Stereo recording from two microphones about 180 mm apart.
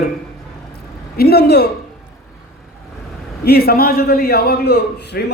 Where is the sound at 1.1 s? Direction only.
60° left (ahead or behind).